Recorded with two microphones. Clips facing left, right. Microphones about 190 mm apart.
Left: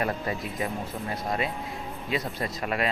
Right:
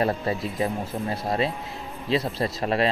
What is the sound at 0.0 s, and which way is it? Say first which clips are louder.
Speech: right 5 dB; 30° right (ahead or behind).